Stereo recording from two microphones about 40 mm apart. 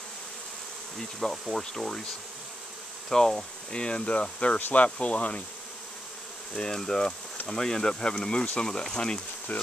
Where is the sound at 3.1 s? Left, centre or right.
Centre.